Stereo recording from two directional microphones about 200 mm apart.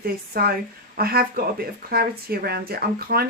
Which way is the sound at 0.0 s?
50° right (ahead or behind).